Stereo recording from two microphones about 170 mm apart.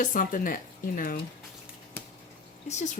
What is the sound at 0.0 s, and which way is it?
Speech, 50° left (ahead or behind).